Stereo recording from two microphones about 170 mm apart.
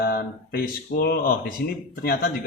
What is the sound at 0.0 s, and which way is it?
Speech, 65° left (ahead or behind).